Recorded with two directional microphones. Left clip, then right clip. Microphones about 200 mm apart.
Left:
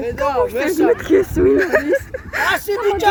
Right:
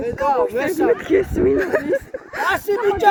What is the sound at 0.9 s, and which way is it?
Speech, 60° left (ahead or behind).